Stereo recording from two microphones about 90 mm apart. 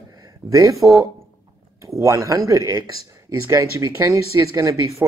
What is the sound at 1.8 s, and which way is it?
Speech, 35° right (ahead or behind).